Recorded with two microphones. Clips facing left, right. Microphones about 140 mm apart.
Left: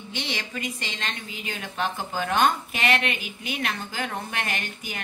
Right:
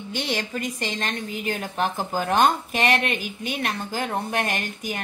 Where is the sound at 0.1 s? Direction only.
45° right (ahead or behind).